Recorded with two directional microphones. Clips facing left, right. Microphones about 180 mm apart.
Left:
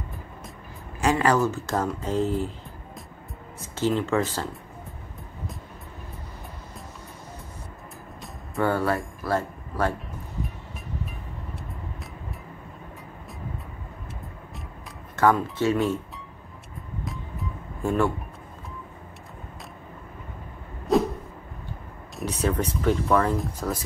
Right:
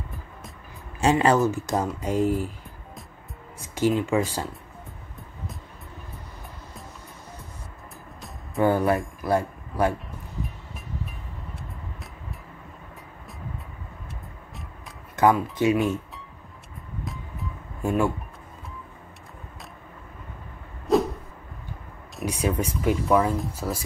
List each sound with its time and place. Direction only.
1.0 s speech: 25° right (ahead or behind)
3.6 s a sound: 15° right (ahead or behind)
4.0 s speech: 15° right (ahead or behind)
8.5 s speech: 15° right (ahead or behind)
15.1 s speech: 15° right (ahead or behind)
17.0 s music: centre (ahead or behind)
20.9 s a sound: centre (ahead or behind)
22.2 s speech: 10° right (ahead or behind)